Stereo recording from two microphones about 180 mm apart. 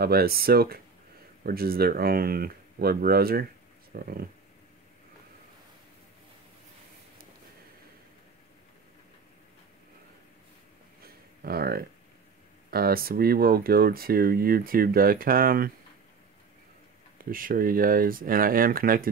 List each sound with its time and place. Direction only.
0.0 s speech: 60° right (ahead or behind)
11.0 s a sound: 55° right (ahead or behind)
12.7 s speech: 55° right (ahead or behind)
17.2 s speech: 50° right (ahead or behind)